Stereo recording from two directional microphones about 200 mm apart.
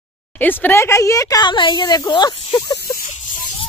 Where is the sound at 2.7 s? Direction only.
45° left (ahead or behind).